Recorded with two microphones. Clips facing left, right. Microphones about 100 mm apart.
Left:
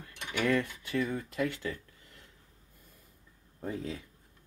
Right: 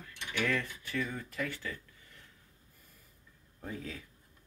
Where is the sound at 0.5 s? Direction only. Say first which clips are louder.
Left 5 dB; 20° left (ahead or behind).